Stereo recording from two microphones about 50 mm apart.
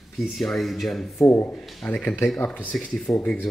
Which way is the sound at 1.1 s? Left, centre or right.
Left.